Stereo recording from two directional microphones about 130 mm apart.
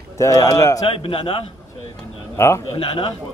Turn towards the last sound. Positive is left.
turn(degrees=45)  # may be behind; listen again after turning